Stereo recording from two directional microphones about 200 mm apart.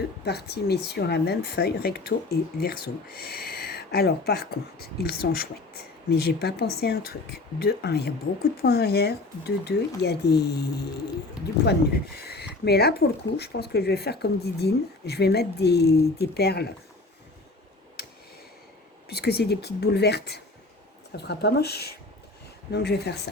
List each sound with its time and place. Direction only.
0.3 s speech: 55° left (ahead or behind)
19.0 s speech: 55° left (ahead or behind)